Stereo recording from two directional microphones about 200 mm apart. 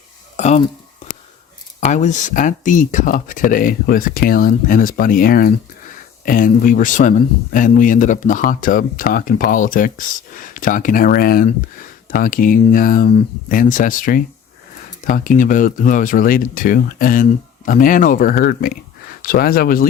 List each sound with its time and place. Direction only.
0.3 s speech: 35° left (ahead or behind)
1.8 s speech: 35° left (ahead or behind)